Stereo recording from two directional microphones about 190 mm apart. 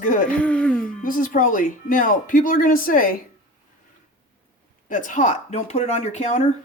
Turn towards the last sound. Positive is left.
turn(degrees=35)  # may be behind; listen again after turning